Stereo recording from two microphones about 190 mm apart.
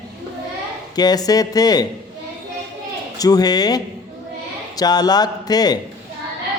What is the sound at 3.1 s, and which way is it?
Speech, 20° left (ahead or behind).